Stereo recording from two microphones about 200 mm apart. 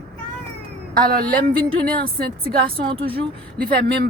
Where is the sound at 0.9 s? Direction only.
45° right (ahead or behind).